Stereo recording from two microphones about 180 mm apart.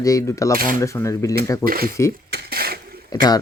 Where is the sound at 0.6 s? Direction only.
50° right (ahead or behind).